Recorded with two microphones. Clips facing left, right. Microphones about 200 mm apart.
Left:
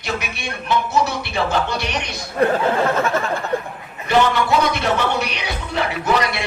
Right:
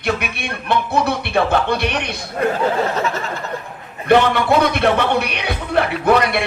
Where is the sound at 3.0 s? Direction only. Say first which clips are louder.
Left 2 dB; 50° left (ahead or behind).